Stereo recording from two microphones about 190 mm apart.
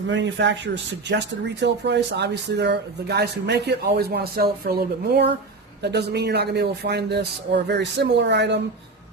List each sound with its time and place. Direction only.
0.1 s speech: 70° right (ahead or behind)